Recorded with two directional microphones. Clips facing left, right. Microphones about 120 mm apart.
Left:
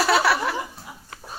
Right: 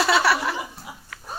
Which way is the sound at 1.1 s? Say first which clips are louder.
Left 2 dB; 30° left (ahead or behind).